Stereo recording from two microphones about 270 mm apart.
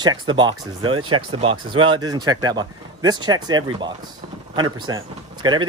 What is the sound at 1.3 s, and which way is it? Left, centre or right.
Speech, centre.